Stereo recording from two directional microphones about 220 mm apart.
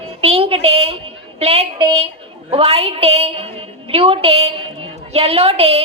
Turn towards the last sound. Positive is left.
turn(degrees=-25)  # may be behind; listen again after turning